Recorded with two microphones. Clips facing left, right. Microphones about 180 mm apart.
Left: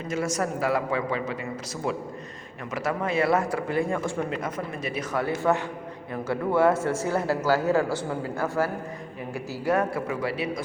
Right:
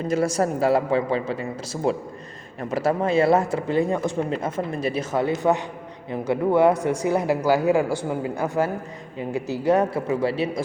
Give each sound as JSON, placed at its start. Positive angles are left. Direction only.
{"t": 0.1, "sound": "a man's voice", "side_deg": -35}